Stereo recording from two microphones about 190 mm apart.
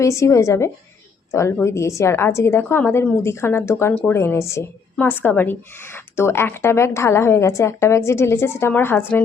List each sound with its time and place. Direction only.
0.0 s a woman's voice: 15° left (ahead or behind)